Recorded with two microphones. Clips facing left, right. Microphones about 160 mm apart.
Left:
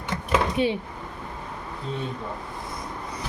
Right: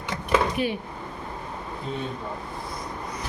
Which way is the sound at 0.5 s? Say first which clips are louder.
Left 3 dB; 25° left (ahead or behind).